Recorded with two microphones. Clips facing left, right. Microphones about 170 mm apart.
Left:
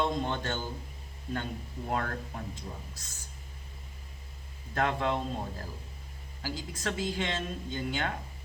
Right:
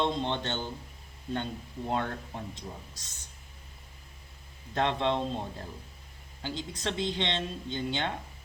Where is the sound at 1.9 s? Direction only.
25° right (ahead or behind).